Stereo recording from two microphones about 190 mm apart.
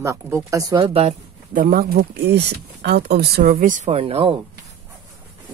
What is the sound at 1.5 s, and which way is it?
Speech, 50° right (ahead or behind).